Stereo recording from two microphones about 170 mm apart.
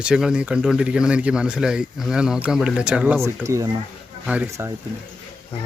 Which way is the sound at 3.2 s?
15° right (ahead or behind).